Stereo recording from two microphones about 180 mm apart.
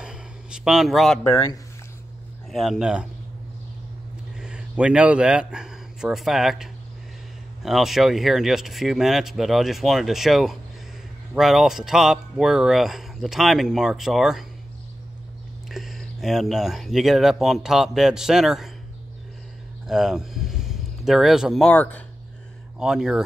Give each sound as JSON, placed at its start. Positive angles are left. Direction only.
{"t": 0.0, "sound": "a sound", "side_deg": -5}
{"t": 1.3, "sound": "speech", "side_deg": 20}
{"t": 2.5, "sound": "speech", "side_deg": 0}
{"t": 4.4, "sound": "speech", "side_deg": -5}
{"t": 15.7, "sound": "speech", "side_deg": 0}
{"t": 19.9, "sound": "speech", "side_deg": -5}
{"t": 22.8, "sound": "speech", "side_deg": -5}